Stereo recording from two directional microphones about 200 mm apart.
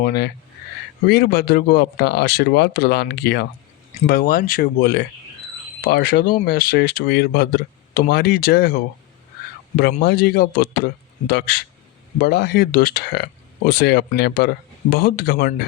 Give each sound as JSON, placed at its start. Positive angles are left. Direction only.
{"t": 0.0, "sound": "speech", "side_deg": 55}
{"t": 10.0, "sound": "speech", "side_deg": 55}